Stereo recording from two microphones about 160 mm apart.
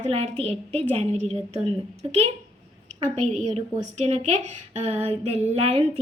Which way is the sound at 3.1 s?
45° right (ahead or behind).